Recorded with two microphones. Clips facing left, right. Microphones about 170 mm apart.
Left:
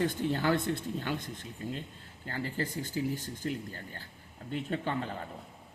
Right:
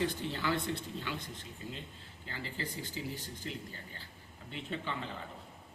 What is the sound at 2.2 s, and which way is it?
Speech, 50° left (ahead or behind).